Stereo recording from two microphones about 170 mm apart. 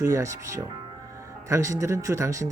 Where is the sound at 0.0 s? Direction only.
20° right (ahead or behind).